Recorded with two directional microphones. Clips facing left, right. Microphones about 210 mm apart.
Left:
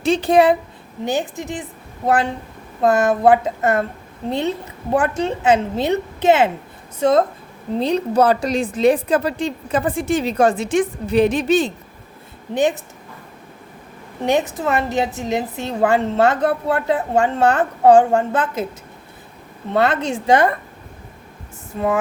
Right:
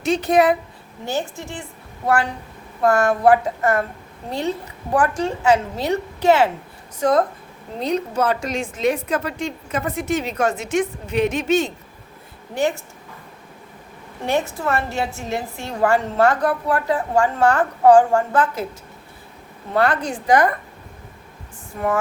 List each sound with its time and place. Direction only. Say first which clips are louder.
0.0 s a woman's voice: left 2 dB; 30° left (ahead or behind)
1.0 s a woman's voice: left 4 dB; 15° left (ahead or behind)
2.8 s a woman's voice: left 1 dB; 20° left (ahead or behind)
12.5 s a woman's voice: left 3 dB; 20° left (ahead or behind)
14.2 s a woman's voice: left 3 dB; 20° left (ahead or behind)
19.7 s a woman's voice: left 2 dB; 25° left (ahead or behind)